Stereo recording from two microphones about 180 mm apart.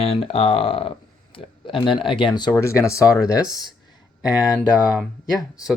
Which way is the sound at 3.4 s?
Centre (ahead or behind).